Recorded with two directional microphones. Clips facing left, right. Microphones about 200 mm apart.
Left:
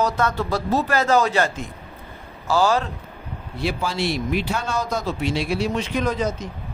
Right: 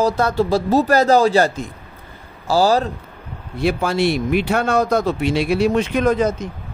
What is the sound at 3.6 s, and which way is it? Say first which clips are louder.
Speech: right 6 dB; 55° right (ahead or behind).